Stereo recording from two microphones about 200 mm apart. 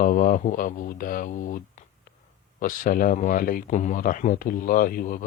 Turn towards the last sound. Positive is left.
turn(degrees=45)  # may be behind; listen again after turning